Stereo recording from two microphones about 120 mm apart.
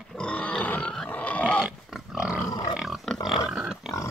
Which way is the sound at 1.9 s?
5° right (ahead or behind).